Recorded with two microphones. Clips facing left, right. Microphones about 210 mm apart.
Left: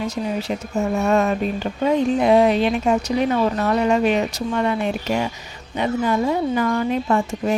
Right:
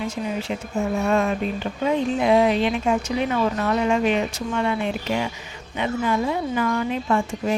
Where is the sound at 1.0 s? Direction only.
40° left (ahead or behind).